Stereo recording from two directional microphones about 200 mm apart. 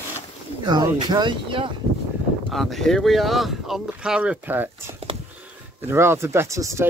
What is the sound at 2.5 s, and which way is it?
Speech, centre (ahead or behind).